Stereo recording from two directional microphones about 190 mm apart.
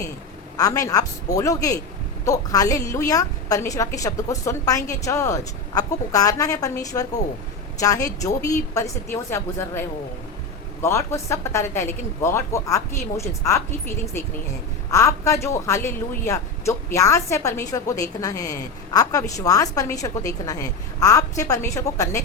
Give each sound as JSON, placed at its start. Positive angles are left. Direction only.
{"t": 0.5, "sound": "a woman's voice", "side_deg": 20}
{"t": 10.8, "sound": "a woman's voice", "side_deg": 15}